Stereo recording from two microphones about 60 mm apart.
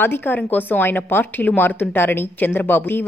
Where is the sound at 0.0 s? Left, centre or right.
Left.